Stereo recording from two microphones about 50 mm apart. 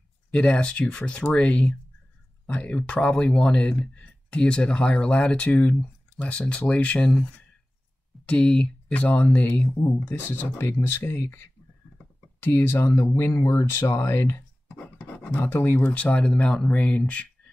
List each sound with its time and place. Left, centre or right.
0.3 s speech: left
5.8 s speech: left
8.3 s speech: left
12.4 s speech: left
13.1 s speech: left
15.3 s speech: left
15.8 s speech: left